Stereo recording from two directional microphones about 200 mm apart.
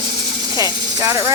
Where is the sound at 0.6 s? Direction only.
15° right (ahead or behind).